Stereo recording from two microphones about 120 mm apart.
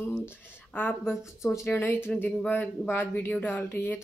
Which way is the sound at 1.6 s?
15° left (ahead or behind).